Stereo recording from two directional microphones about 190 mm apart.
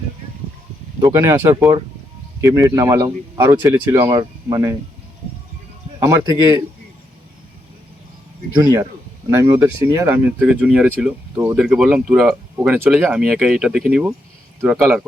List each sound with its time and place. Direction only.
1.0 s speech: 15° right (ahead or behind)
8.5 s speech: 20° right (ahead or behind); by 15.0 s 5° right (ahead or behind)